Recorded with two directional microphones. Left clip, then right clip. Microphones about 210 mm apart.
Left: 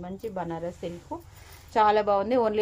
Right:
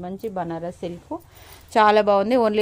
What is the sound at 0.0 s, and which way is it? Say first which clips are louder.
Speech: right 5 dB; 50° right (ahead or behind).